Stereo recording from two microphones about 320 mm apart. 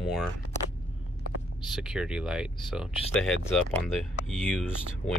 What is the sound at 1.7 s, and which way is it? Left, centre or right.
Speech, centre.